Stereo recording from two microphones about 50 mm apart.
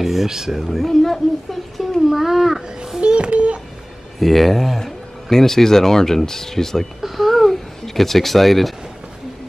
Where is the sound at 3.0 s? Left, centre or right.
Right.